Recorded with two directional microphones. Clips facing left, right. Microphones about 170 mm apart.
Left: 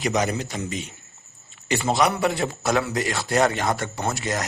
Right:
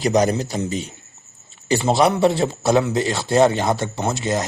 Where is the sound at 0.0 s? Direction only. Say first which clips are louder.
Right 6 dB; 35° right (ahead or behind).